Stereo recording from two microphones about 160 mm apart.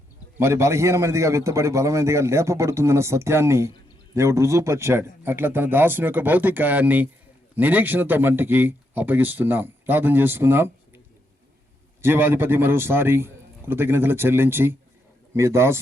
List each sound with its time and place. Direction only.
0.3 s speech: 15° right (ahead or behind)
12.0 s speech: 15° right (ahead or behind)